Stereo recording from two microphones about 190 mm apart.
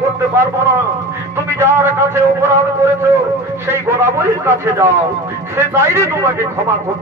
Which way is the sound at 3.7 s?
15° right (ahead or behind).